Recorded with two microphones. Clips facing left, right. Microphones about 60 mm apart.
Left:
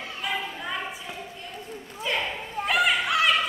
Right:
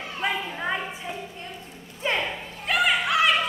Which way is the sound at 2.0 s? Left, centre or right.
Right.